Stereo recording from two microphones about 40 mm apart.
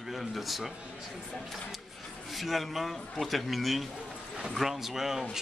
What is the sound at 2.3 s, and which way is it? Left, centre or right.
A man's voice, centre.